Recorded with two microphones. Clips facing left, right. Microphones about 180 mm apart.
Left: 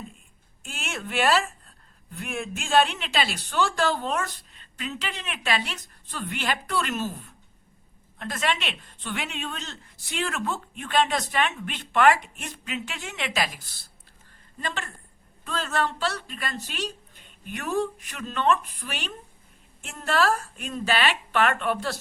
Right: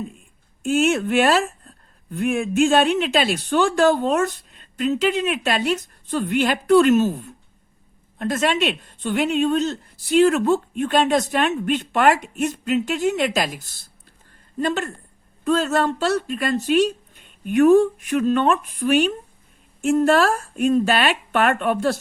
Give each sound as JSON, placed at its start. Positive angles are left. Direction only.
{"t": 0.6, "sound": "speech", "side_deg": -50}
{"t": 14.6, "sound": "speech", "side_deg": -45}